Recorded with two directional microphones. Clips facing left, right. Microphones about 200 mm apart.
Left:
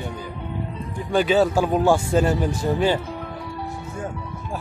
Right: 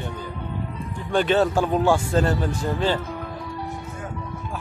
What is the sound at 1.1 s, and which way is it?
A man's voice, 5° left (ahead or behind).